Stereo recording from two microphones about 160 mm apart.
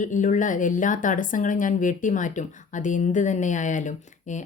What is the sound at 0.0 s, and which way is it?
A woman's voice, 50° left (ahead or behind).